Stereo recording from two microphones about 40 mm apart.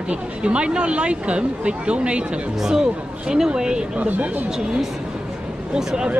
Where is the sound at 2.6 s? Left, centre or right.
Centre.